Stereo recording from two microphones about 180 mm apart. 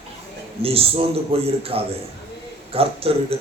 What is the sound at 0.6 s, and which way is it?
A man's voice, 30° right (ahead or behind).